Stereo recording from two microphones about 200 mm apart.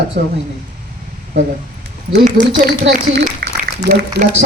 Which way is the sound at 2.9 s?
45° right (ahead or behind).